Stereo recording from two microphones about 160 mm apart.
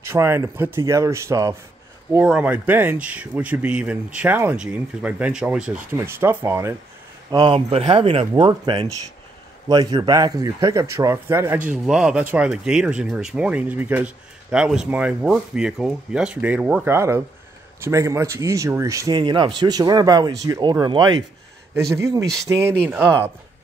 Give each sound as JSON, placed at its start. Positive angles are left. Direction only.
{"t": 0.1, "sound": "a man's voice", "side_deg": -15}
{"t": 2.2, "sound": "a man's voice", "side_deg": -5}
{"t": 7.2, "sound": "a man's voice", "side_deg": -30}